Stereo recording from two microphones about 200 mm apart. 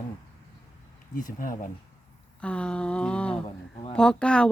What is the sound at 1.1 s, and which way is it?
Speech, 45° left (ahead or behind).